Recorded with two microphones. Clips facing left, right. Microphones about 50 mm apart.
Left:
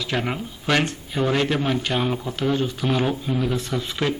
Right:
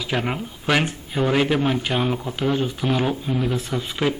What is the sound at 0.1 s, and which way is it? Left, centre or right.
Speech, centre.